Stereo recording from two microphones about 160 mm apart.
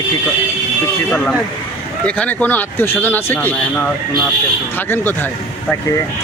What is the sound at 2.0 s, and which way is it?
Speech, 10° left (ahead or behind).